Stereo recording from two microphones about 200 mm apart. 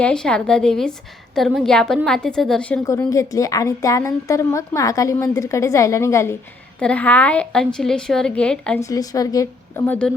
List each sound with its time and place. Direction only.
0.0 s a woman's voice: 5° left (ahead or behind)
2.8 s a woman's voice: 15° left (ahead or behind)
8.8 s a woman's voice: 15° left (ahead or behind)